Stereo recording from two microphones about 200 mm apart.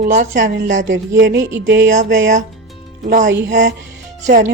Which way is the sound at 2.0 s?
40° right (ahead or behind).